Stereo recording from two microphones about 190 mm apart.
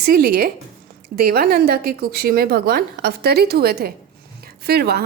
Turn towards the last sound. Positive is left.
turn(degrees=-55)  # may be behind; listen again after turning